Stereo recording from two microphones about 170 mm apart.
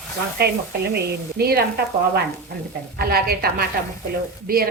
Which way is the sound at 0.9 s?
65° right (ahead or behind).